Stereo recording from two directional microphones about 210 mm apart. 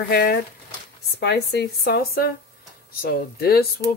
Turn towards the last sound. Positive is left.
turn(degrees=45)  # may be behind; listen again after turning